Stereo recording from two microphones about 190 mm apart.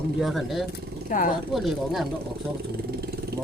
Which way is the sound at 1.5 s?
Centre (ahead or behind).